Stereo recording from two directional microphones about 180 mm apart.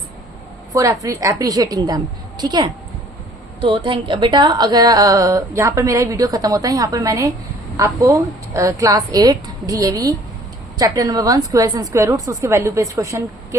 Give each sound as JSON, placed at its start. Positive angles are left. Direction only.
{"t": 0.7, "sound": "a woman's voice", "side_deg": -20}